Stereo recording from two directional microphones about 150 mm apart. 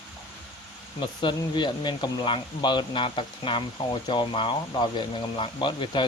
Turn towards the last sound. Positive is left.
turn(degrees=35)  # may be behind; listen again after turning